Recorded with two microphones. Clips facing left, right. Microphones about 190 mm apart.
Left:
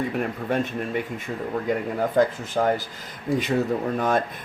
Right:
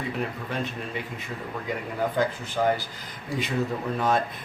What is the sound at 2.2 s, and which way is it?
Speech, 45° left (ahead or behind).